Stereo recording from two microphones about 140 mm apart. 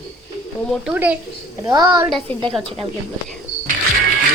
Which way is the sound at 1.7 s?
30° right (ahead or behind).